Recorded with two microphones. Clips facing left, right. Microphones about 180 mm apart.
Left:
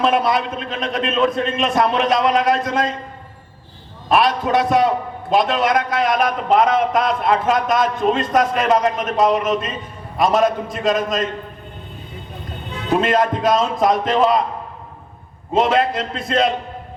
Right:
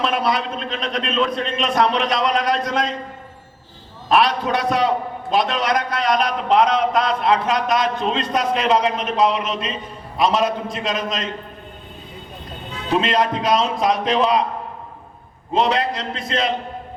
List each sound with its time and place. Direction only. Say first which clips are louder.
0.0 s a man's voice: left 3 dB; 50° left (ahead or behind)
4.2 s a man's voice: left 5 dB; 50° left (ahead or behind)
13.0 s a man's voice: left 2 dB; 50° left (ahead or behind)
15.6 s a man's voice: left 3 dB; 50° left (ahead or behind)